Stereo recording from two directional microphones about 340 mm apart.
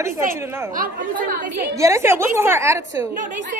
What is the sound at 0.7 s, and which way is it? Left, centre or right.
Speech, right.